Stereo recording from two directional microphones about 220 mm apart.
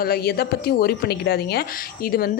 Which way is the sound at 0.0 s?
45° left (ahead or behind).